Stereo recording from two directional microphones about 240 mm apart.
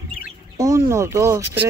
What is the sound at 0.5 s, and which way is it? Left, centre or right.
Speech, centre.